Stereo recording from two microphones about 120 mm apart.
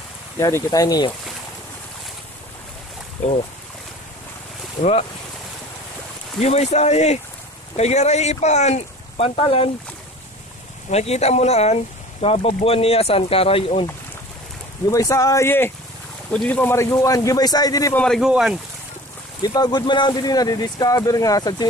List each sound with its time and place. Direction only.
0.4 s speech: 25° left (ahead or behind)
6.4 s speech: 65° left (ahead or behind)
10.9 s speech: 65° left (ahead or behind)
14.9 s speech: 25° left (ahead or behind)
17.9 s speech: 5° left (ahead or behind)
18.2 s speech: 5° right (ahead or behind)
19.4 s speech: 35° left (ahead or behind)